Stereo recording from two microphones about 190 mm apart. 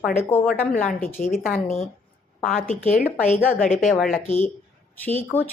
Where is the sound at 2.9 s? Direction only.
40° left (ahead or behind).